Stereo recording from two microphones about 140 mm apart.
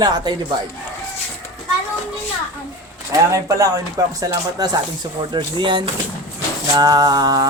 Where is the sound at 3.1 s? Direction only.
25° right (ahead or behind).